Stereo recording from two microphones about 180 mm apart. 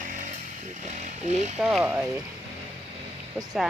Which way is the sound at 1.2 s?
40° right (ahead or behind).